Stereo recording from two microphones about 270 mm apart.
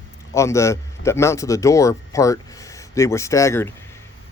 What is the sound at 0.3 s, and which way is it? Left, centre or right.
Speech, centre.